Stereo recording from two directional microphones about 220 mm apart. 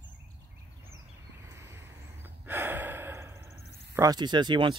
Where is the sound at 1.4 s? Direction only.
10° right (ahead or behind).